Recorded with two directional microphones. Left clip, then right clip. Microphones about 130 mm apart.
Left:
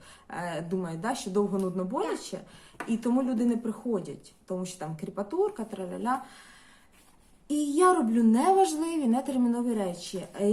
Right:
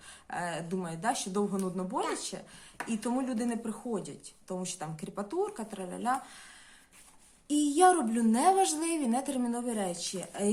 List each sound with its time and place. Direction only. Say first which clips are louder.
0.3 s a woman's voice: left 2 dB; 20° right (ahead or behind)
7.4 s a woman's voice: left 1 dB; 20° right (ahead or behind)